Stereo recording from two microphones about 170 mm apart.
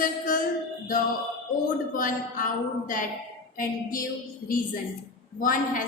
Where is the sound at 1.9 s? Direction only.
55° left (ahead or behind).